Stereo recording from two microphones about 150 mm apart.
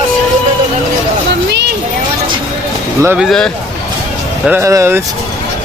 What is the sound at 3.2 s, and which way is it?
Speech, centre (ahead or behind).